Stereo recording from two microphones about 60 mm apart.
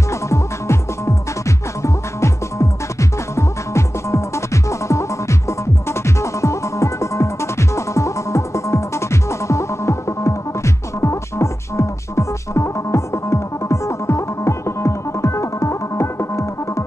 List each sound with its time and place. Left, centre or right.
0.1 s music: left